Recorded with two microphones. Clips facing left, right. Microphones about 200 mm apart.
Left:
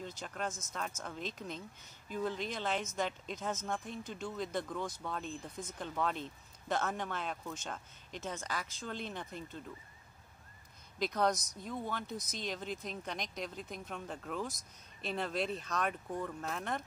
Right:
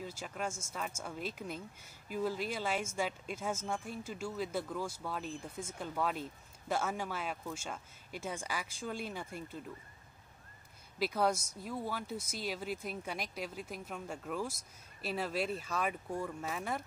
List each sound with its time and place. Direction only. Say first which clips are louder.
0.0 s speech: right 1 dB; 5° right (ahead or behind)
11.0 s speech: even; 5° right (ahead or behind)